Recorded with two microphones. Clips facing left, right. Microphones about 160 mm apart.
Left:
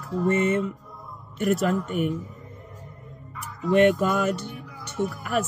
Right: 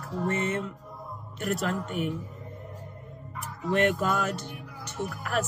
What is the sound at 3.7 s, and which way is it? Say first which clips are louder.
Speech: left 6 dB; 5° left (ahead or behind).